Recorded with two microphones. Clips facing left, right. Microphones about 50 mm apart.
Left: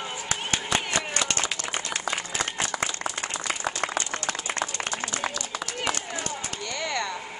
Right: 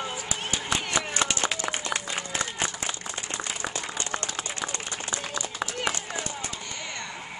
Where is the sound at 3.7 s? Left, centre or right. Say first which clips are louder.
Left 6 dB; left.